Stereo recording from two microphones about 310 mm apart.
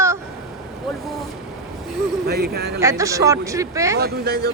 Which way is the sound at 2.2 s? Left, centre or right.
Right.